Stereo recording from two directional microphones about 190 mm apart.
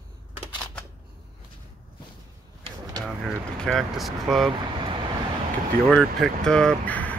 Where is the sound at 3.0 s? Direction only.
Centre (ahead or behind).